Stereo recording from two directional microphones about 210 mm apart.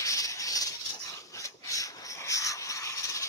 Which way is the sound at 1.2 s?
15° left (ahead or behind).